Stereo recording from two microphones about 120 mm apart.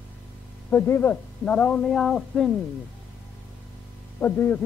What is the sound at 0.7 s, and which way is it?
A man's voice, 20° left (ahead or behind).